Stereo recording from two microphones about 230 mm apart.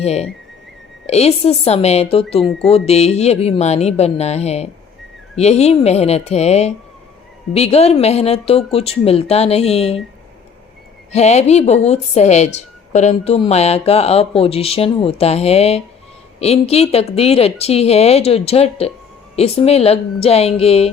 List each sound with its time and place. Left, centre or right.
0.0 s speech: left
2.4 s speech: centre
2.6 s speech: left
11.1 s speech: left